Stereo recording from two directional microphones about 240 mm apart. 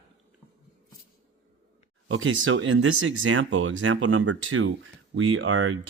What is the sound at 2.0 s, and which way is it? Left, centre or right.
Speech, right.